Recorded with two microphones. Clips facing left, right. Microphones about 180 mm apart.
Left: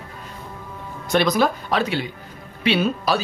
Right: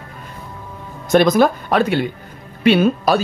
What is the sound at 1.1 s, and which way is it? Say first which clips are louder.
Speech: right 6 dB; 50° right (ahead or behind).